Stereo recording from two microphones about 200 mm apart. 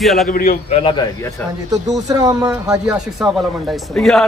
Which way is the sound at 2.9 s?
Centre (ahead or behind).